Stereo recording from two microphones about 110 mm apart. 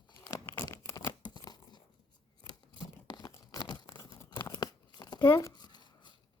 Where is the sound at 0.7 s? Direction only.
25° left (ahead or behind).